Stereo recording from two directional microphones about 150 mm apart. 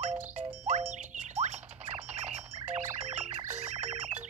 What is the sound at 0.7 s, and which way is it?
Rodents, 55° right (ahead or behind).